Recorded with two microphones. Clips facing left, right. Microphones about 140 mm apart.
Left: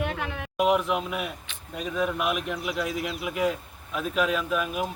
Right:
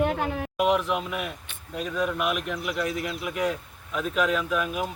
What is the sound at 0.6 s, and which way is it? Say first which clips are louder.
A man's voice: left 1 dB; centre (ahead or behind).